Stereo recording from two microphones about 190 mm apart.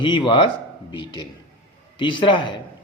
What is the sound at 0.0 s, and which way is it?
A man's voice, 25° left (ahead or behind).